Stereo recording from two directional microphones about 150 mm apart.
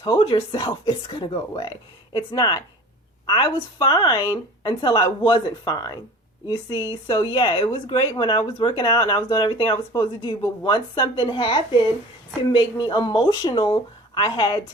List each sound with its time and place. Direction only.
0.0 s speech: 35° left (ahead or behind)
7.1 s speech: 30° left (ahead or behind)